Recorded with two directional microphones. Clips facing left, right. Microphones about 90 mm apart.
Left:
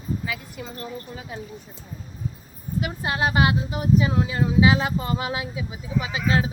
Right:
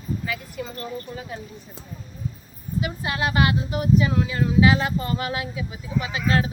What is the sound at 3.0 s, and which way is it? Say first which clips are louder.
Speech: left 1 dB; 30° left (ahead or behind).